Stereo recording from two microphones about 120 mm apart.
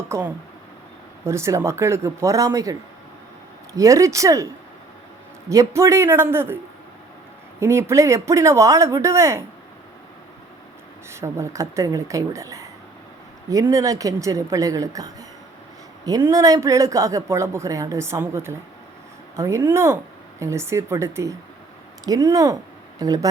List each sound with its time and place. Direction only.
0.1 s speech: 15° right (ahead or behind)
3.8 s speech: 25° right (ahead or behind)
5.5 s speech: 25° right (ahead or behind)
7.6 s speech: 20° right (ahead or behind)
11.1 s speech: 25° right (ahead or behind)
16.2 s speech: 30° right (ahead or behind)